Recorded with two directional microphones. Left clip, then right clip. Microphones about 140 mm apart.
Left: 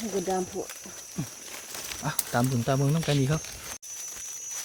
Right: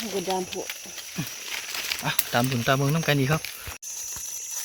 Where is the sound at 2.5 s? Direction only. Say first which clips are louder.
Right 4 dB; 10° right (ahead or behind).